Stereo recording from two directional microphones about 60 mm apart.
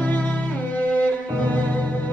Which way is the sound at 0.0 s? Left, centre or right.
Left.